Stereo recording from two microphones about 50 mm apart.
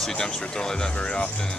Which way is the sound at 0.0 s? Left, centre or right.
Centre.